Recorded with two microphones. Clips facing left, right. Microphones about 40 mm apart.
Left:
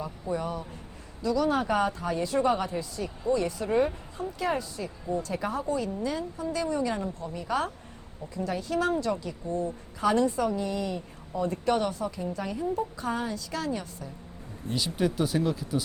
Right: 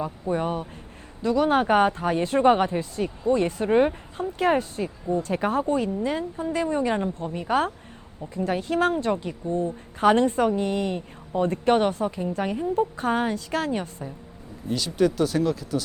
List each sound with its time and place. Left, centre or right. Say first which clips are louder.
0.0 s speech: right 5 dB; right
14.7 s speech: right 5 dB; centre